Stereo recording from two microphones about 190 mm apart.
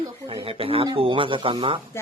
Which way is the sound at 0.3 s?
30° right (ahead or behind).